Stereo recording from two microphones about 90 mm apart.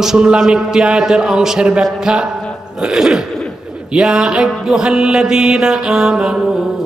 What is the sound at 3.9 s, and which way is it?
Mantra, 10° right (ahead or behind).